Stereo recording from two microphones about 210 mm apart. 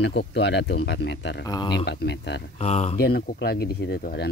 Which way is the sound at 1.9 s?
50° left (ahead or behind).